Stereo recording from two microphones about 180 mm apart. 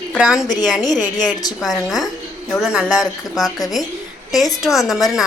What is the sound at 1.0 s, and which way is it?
Speech, 20° left (ahead or behind).